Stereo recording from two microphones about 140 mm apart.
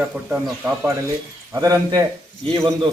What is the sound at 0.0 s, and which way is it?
Speech, 10° right (ahead or behind).